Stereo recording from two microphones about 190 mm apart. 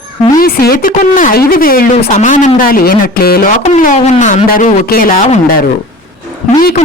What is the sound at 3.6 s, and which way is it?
Speech, 40° left (ahead or behind).